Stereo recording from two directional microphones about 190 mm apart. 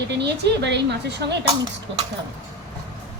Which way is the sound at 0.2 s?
65° right (ahead or behind).